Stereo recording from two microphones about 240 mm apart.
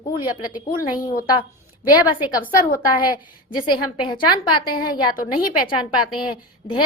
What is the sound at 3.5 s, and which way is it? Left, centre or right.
A woman's voice, centre.